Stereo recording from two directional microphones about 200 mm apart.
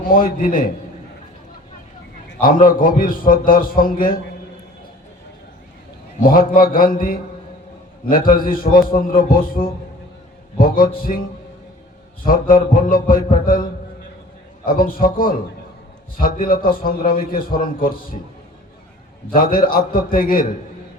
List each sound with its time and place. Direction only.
0.0 s a man's voice: 45° left (ahead or behind)
2.4 s a man's voice: 45° left (ahead or behind)
6.2 s a man's voice: 45° left (ahead or behind)
11.1 s a man's voice: 35° left (ahead or behind)
14.6 s a man's voice: 45° left (ahead or behind)
19.3 s a man's voice: 45° left (ahead or behind)